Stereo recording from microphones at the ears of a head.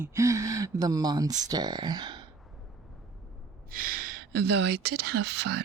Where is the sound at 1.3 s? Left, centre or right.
Right.